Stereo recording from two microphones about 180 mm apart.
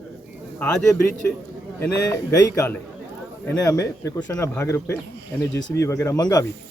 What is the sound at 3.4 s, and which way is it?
Speech, 20° left (ahead or behind).